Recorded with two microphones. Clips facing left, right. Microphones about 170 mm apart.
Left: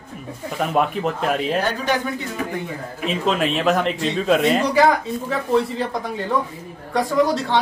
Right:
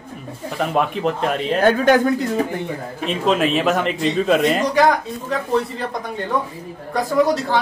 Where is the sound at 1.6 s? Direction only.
50° right (ahead or behind).